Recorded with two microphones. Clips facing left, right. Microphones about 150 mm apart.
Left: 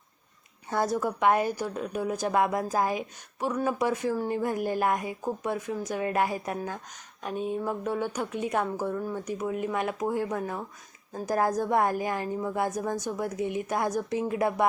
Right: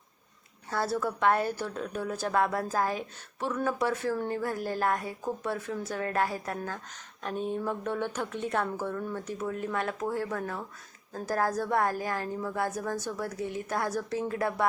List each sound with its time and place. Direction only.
0.7 s a woman's voice: 15° left (ahead or behind)